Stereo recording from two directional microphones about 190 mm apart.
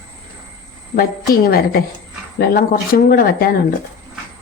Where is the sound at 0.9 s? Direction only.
50° left (ahead or behind).